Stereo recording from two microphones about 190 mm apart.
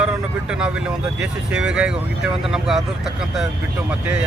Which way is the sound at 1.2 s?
5° right (ahead or behind).